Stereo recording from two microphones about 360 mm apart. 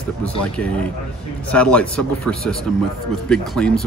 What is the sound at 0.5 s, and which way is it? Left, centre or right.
Speech, centre.